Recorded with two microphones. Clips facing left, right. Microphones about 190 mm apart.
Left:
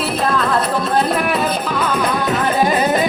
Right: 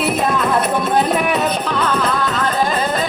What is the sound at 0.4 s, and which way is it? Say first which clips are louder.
Music: right 1 dB; 20° right (ahead or behind).